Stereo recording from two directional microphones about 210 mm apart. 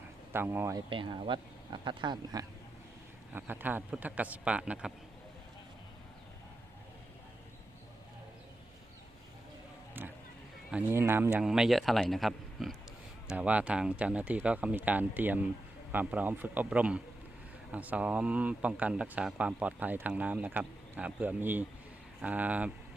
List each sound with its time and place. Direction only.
0.3 s speech: 10° right (ahead or behind)
0.9 s speech: 25° right (ahead or behind)
3.3 s speech: 10° right (ahead or behind)
10.0 s a sound: 10° right (ahead or behind)
10.7 s speech: 10° right (ahead or behind)